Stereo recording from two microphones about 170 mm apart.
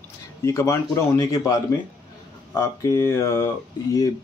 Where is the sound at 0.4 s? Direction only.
15° left (ahead or behind).